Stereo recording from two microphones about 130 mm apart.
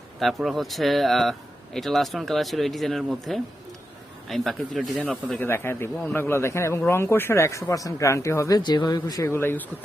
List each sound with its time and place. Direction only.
0.2 s speech: centre (ahead or behind)
5.4 s a man's voice: 20° left (ahead or behind)